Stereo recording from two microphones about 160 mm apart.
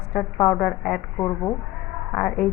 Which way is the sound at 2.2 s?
5° left (ahead or behind).